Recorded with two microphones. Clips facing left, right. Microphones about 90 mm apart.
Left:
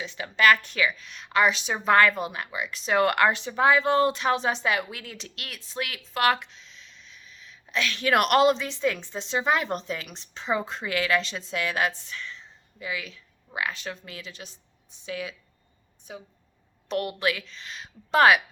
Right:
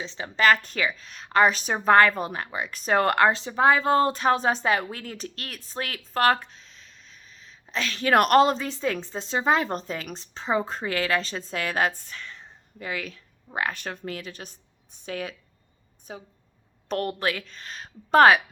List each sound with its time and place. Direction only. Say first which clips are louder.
0.0 s a woman's voice: even; 30° right (ahead or behind)